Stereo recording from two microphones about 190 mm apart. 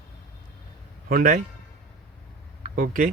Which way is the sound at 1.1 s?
50° right (ahead or behind).